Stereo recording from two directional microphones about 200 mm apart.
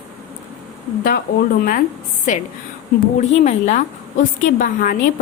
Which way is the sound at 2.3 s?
40° left (ahead or behind).